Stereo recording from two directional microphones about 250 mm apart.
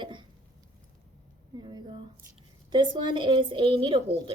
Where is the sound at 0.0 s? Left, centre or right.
Centre.